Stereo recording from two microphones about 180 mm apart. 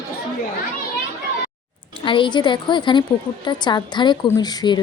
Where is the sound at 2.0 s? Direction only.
25° left (ahead or behind).